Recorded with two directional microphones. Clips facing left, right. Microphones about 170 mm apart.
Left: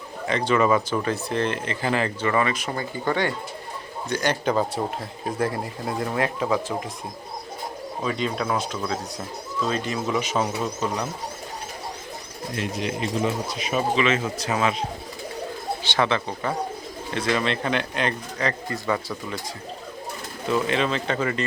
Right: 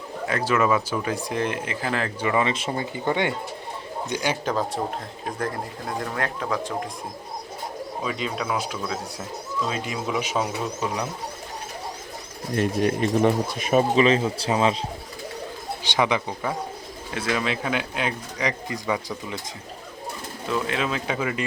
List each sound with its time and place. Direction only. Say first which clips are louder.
0.3 s speech: left 2 dB; 5° right (ahead or behind)
2.2 s speech: right 1 dB; 15° right (ahead or behind)
2.5 s speech: right 1 dB; 25° right (ahead or behind)
4.1 s speech: left 3 dB; 10° right (ahead or behind)
6.1 s speech: left 5 dB; 5° left (ahead or behind)
8.0 s speech: left 3 dB; 5° right (ahead or behind)
12.5 s speech: right 6 dB; 50° right (ahead or behind); by 14.8 s 30° right (ahead or behind)
15.8 s speech: right 1 dB; 15° right (ahead or behind)
20.5 s speech: left 3 dB; centre (ahead or behind)